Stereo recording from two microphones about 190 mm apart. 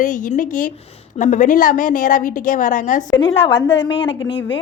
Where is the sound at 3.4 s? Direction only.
70° left (ahead or behind).